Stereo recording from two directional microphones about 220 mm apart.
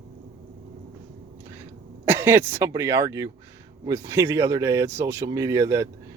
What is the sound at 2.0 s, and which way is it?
Speech, 10° right (ahead or behind).